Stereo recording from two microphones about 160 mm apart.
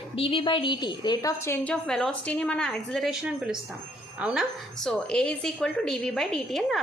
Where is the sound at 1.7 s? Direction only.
5° left (ahead or behind).